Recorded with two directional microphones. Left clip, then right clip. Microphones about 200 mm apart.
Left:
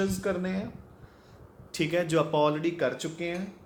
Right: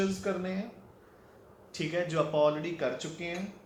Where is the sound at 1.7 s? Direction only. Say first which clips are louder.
Left 5 dB; 55° left (ahead or behind).